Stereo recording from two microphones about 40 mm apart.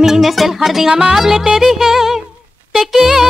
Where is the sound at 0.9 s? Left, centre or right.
Right.